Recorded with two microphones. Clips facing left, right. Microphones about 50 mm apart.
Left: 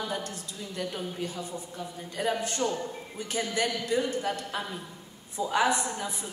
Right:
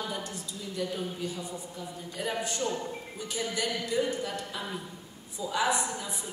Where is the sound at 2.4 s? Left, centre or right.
Left.